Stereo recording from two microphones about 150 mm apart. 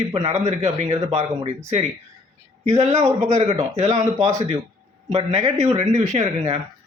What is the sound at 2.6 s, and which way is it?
A woman's voice, 50° right (ahead or behind).